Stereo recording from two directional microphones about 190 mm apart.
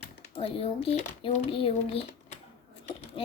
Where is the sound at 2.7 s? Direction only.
30° left (ahead or behind).